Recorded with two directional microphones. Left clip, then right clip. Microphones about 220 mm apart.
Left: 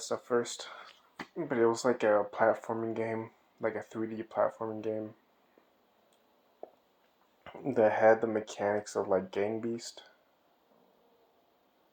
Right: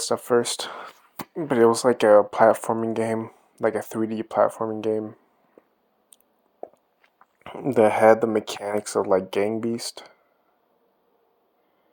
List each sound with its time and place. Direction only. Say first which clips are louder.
0.0 s speech: right 10 dB; 55° right (ahead or behind)
6.6 s a sound: right 9 dB; 50° right (ahead or behind)
7.4 s speech: right 8 dB; 55° right (ahead or behind)